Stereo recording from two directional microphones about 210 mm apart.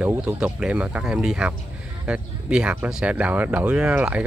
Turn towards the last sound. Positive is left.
turn(degrees=-5)  # may be behind; listen again after turning